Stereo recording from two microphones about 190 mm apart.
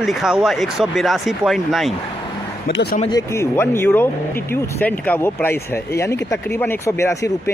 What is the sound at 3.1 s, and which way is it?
Speech, 15° left (ahead or behind).